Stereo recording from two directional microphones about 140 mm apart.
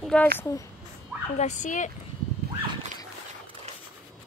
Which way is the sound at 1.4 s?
60° left (ahead or behind).